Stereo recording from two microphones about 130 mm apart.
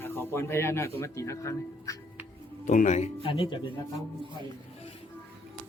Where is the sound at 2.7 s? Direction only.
70° left (ahead or behind).